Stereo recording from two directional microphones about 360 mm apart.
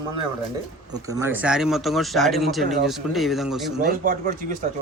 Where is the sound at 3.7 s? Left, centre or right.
Right.